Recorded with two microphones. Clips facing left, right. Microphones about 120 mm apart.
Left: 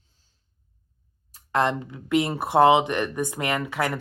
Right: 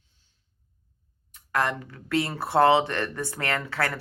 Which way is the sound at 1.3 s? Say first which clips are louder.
Left 3 dB; 25° left (ahead or behind).